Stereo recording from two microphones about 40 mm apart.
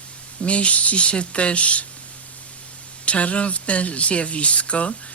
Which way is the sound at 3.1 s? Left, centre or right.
Left.